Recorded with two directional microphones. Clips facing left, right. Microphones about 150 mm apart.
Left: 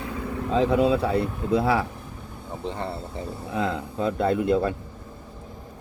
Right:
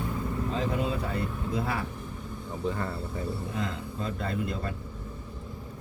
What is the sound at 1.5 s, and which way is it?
Speech, 75° left (ahead or behind).